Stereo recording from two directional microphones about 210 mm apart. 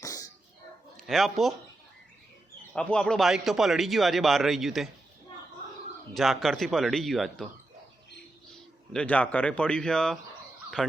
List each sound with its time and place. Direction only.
0.0 s a sound: 15° left (ahead or behind)
0.9 s speech: centre (ahead or behind)
2.7 s a man's voice: 5° left (ahead or behind)
6.1 s a man's voice: centre (ahead or behind)
8.9 s a man's voice: 5° left (ahead or behind)